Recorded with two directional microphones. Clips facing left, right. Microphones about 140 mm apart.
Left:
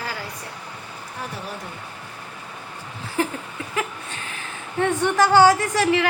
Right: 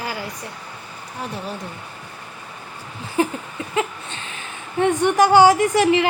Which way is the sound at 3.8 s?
25° right (ahead or behind).